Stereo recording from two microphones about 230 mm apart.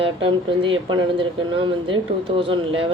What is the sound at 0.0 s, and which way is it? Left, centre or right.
A woman's voice, right.